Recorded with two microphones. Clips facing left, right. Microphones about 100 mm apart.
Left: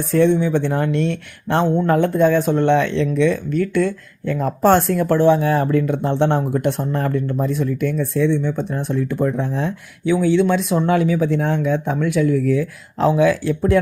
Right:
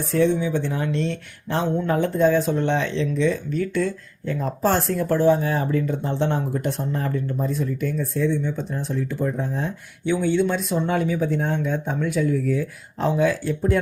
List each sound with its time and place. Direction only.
0.1 s speech: 60° left (ahead or behind); by 13.7 s 90° left